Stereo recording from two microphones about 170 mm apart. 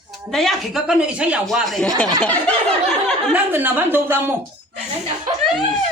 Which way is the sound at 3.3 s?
10° right (ahead or behind).